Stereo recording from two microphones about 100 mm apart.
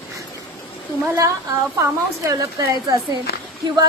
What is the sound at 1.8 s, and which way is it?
Speech, 30° right (ahead or behind).